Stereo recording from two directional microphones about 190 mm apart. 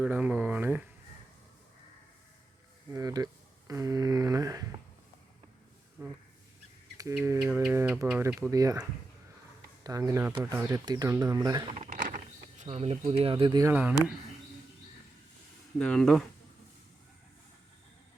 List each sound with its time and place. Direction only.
0.0 s speech: 10° right (ahead or behind)
2.9 s speech: 20° right (ahead or behind)
6.0 s speech: 10° right (ahead or behind)
10.8 s speech: 20° right (ahead or behind)
15.8 s speech: 5° left (ahead or behind)